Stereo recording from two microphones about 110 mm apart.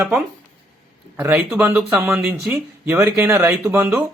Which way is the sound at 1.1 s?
20° right (ahead or behind).